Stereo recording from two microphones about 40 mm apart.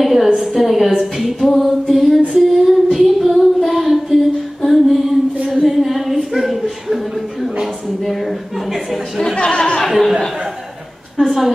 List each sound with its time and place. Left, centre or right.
0.0 s a woman's voice: centre
2.3 s female singing: centre
3.3 s child singing: centre
4.6 s music: centre
5.5 s a sound: centre
9.2 s music: left
9.8 s a sound: centre